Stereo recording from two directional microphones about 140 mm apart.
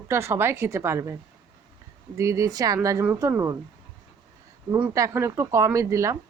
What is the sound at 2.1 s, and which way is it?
A woman's voice, 20° right (ahead or behind).